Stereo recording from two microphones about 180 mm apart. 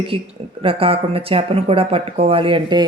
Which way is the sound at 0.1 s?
30° right (ahead or behind).